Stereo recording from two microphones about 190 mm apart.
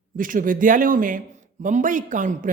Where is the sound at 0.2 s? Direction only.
45° right (ahead or behind).